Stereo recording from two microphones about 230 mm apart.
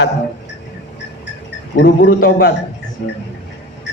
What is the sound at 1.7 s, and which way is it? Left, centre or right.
Speech, left.